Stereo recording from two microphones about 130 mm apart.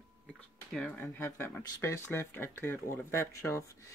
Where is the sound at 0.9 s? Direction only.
20° left (ahead or behind).